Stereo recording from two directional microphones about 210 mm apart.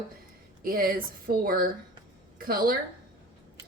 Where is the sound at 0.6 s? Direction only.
45° right (ahead or behind).